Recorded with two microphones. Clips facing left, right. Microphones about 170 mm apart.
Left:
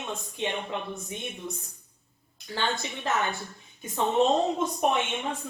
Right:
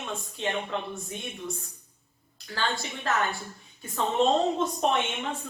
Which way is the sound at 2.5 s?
20° left (ahead or behind).